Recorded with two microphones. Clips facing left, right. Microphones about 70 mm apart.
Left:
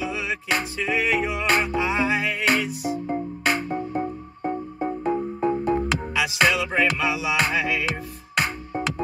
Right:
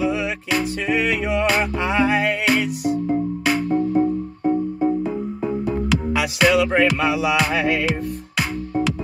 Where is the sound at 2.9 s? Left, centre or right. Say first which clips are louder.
Right 6 dB; centre.